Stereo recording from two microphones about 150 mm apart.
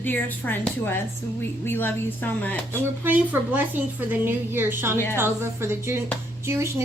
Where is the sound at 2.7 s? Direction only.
15° right (ahead or behind).